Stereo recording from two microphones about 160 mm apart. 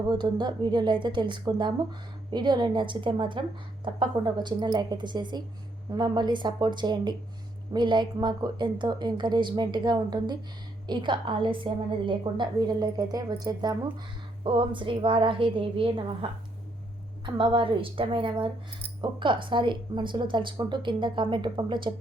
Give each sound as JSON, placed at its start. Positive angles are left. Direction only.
{"t": 0.1, "sound": "a woman's voice", "side_deg": -25}